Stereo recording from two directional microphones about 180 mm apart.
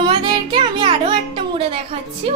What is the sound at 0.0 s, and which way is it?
Music, 25° right (ahead or behind).